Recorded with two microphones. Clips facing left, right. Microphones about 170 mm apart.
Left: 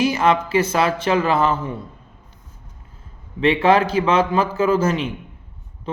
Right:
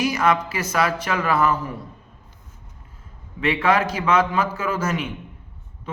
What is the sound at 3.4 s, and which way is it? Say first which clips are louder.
A man's voice: left 5 dB; 30° left (ahead or behind).